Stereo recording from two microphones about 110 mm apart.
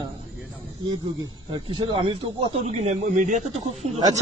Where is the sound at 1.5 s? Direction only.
50° right (ahead or behind).